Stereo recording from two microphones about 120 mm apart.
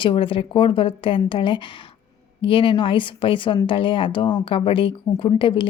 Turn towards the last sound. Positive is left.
turn(degrees=45)  # may be behind; listen again after turning